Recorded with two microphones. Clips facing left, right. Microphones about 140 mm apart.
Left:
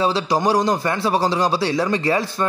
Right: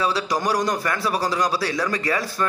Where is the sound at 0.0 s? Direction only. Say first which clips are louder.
Left 4 dB; 25° left (ahead or behind).